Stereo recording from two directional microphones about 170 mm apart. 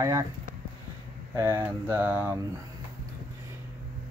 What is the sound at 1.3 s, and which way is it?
Speech, 15° right (ahead or behind).